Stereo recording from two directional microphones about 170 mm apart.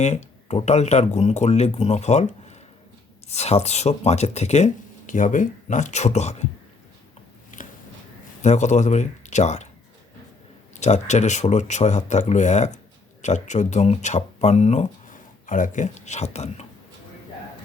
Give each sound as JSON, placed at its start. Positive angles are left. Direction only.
{"t": 0.0, "sound": "speech", "side_deg": 40}
{"t": 7.5, "sound": "a sound", "side_deg": 50}
{"t": 8.4, "sound": "speech", "side_deg": 45}
{"t": 10.8, "sound": "speech", "side_deg": 45}